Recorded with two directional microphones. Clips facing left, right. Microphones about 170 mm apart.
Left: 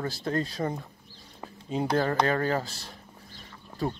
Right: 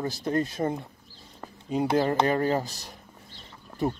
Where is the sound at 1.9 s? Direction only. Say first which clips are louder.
Right 1 dB; 20° right (ahead or behind).